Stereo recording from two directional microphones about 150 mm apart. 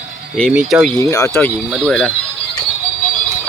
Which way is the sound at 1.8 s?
Centre (ahead or behind).